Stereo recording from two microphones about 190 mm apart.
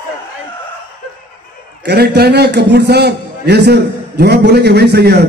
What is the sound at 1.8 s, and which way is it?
A man's voice, 60° right (ahead or behind).